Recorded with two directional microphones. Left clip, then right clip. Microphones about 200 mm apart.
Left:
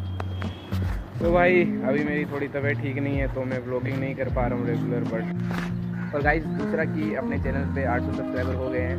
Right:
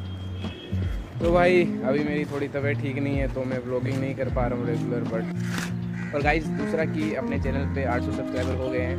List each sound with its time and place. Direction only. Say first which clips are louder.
1.2 s speech: even; 15° right (ahead or behind)
6.1 s speech: even; 10° right (ahead or behind)